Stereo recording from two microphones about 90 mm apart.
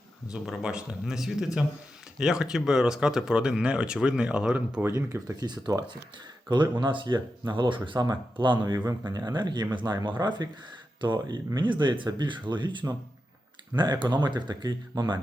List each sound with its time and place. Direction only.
0.3 s speech: 10° right (ahead or behind)
4.8 s speech: 35° right (ahead or behind)
5.5 s speech: 50° right (ahead or behind)
7.9 s speech: 50° right (ahead or behind)